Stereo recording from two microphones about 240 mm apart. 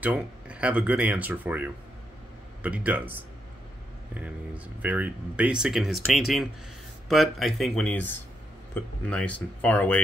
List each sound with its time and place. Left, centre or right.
0.0 s speech: centre